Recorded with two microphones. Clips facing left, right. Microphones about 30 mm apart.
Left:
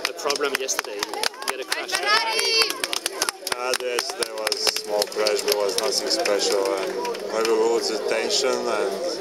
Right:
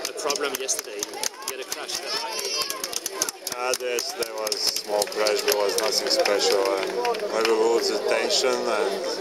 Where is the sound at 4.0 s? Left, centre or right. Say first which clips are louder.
Left 2 dB; left.